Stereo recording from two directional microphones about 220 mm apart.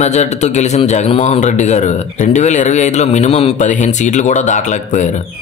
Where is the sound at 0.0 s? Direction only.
30° left (ahead or behind).